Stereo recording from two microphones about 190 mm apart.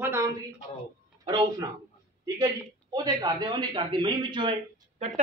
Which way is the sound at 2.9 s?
20° right (ahead or behind).